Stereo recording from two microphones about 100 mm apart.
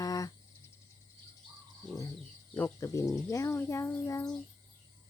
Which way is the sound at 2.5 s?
30° left (ahead or behind).